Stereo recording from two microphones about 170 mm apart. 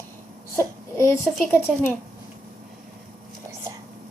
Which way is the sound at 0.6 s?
15° left (ahead or behind).